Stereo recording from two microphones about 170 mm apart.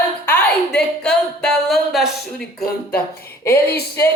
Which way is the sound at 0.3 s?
5° left (ahead or behind).